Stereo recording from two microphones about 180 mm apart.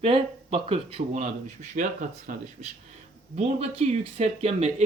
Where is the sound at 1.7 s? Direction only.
50° right (ahead or behind).